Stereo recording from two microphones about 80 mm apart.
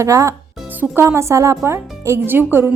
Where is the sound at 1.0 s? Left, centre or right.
Right.